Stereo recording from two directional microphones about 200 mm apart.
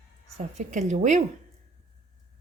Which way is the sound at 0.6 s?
35° right (ahead or behind).